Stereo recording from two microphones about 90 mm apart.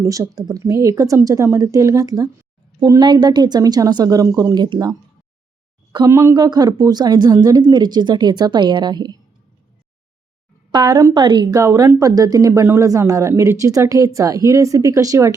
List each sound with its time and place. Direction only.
0.0 s a woman's voice: 40° right (ahead or behind)
6.1 s speech: 30° right (ahead or behind)
6.3 s a woman's voice: 50° right (ahead or behind)
10.7 s a woman's voice: 50° right (ahead or behind)
11.5 s speech: 35° right (ahead or behind)